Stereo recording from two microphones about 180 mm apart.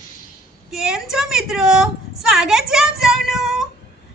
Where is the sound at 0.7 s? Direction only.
5° right (ahead or behind).